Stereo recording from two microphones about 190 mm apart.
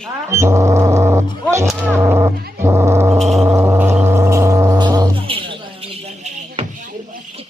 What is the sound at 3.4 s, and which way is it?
Cat, 15° right (ahead or behind).